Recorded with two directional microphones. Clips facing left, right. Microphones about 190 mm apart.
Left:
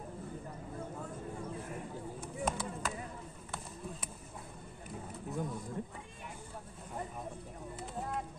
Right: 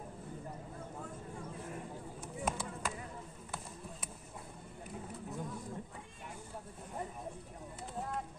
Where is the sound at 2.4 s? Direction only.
10° right (ahead or behind).